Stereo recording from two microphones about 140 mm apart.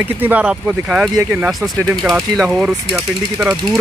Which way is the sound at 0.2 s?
10° right (ahead or behind).